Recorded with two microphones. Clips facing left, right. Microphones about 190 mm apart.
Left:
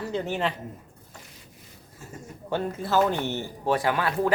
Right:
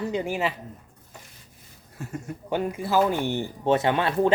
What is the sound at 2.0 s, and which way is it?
Speech, 60° right (ahead or behind).